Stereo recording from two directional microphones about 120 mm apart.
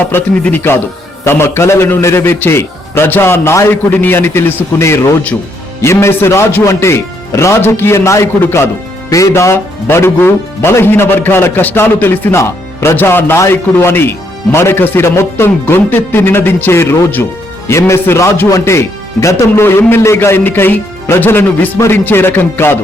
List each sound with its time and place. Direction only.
0.0 s speech: 15° left (ahead or behind)